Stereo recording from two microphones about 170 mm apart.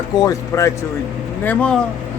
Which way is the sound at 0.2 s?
20° left (ahead or behind).